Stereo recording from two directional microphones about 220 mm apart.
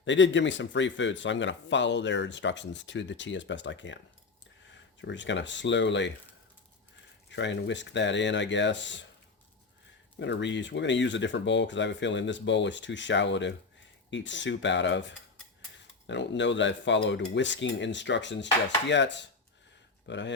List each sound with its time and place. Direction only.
0.0 s speech: 55° left (ahead or behind)
7.3 s speech: 55° left (ahead or behind)
10.2 s speech: 55° left (ahead or behind)
18.9 s dishes: 55° left (ahead or behind)